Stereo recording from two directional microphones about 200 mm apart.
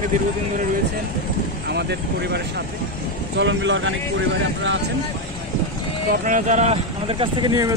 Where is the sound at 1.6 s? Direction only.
55° right (ahead or behind).